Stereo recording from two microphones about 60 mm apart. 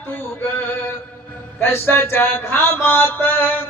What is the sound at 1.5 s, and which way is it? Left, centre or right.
A man's voice, left.